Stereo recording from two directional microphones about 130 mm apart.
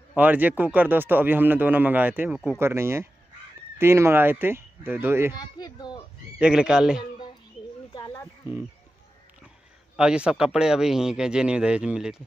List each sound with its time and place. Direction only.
0.1 s speech: 10° right (ahead or behind)
5.6 s speech: 35° left (ahead or behind)
6.3 s speech: 5° right (ahead or behind)
7.0 s a sound: 35° left (ahead or behind)
7.9 s wild animals: 35° left (ahead or behind)
9.9 s speech: 5° right (ahead or behind)